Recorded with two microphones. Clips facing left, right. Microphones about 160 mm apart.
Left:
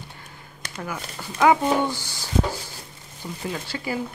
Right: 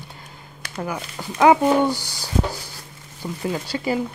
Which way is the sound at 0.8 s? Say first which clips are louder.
Right 4 dB; 25° right (ahead or behind).